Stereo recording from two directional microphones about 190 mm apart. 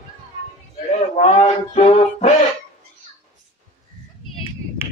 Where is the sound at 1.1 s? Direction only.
35° left (ahead or behind).